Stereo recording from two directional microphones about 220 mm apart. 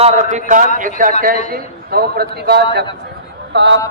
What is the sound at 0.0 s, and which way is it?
A man's voice, 30° right (ahead or behind).